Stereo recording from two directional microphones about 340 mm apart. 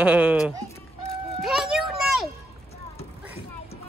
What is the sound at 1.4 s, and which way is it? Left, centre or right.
Children playing, centre.